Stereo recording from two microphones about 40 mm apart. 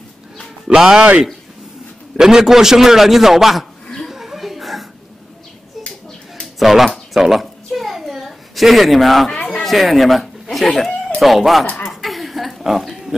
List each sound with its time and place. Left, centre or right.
0.7 s a man's voice: centre
2.1 s a man's voice: centre
4.1 s chuckle: centre
6.4 s bird: centre
7.2 s a sound: centre
9.5 s speech: centre
11.8 s a sound: centre